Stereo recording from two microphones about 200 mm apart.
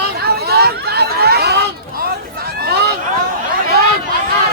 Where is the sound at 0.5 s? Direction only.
55° right (ahead or behind).